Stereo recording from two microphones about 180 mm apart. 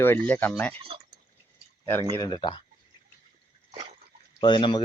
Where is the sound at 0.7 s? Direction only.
30° right (ahead or behind).